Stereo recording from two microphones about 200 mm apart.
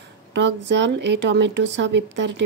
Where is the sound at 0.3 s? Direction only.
65° right (ahead or behind).